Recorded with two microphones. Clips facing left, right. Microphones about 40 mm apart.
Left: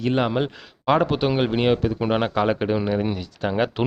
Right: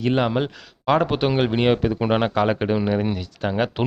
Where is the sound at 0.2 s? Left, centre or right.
Centre.